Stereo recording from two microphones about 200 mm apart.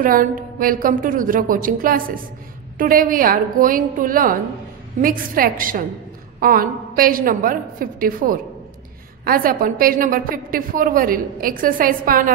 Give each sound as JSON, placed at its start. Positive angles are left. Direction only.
{"t": 0.0, "sound": "a woman's voice", "side_deg": -45}